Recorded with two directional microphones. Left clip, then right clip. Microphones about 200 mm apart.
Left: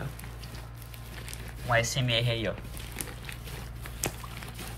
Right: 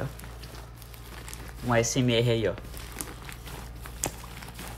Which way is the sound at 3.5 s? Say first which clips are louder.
Even; centre (ahead or behind).